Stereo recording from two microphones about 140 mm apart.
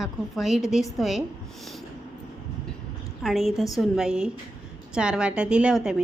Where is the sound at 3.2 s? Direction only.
Centre (ahead or behind).